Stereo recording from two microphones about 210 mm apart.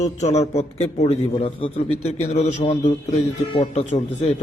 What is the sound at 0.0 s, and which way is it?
A man's voice, 30° left (ahead or behind).